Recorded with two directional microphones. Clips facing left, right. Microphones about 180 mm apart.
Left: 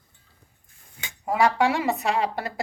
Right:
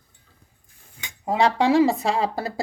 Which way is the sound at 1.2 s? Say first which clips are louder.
Right 2 dB; 25° right (ahead or behind).